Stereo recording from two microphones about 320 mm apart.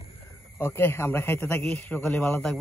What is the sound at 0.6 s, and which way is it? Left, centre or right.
A man's voice, centre.